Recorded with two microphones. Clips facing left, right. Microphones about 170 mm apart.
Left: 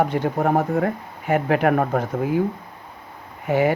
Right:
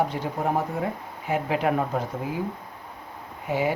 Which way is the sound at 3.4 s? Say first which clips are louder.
Left 6 dB; 60° left (ahead or behind).